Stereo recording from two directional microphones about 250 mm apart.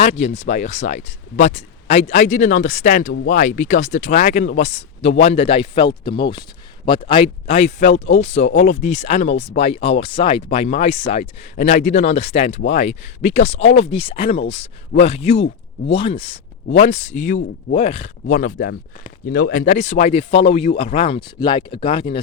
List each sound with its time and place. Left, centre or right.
0.0 s speech: left